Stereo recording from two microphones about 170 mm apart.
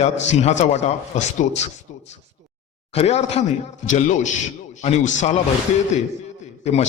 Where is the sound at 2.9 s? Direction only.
40° left (ahead or behind).